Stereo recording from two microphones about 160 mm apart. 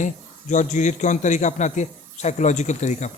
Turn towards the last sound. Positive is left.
turn(degrees=45)  # may be behind; listen again after turning